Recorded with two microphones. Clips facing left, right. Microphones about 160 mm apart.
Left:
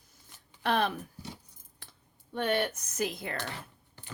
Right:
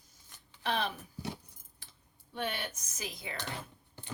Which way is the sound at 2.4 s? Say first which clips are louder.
Left 11 dB; 60° left (ahead or behind).